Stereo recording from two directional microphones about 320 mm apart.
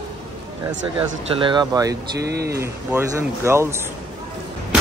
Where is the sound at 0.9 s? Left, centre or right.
Centre.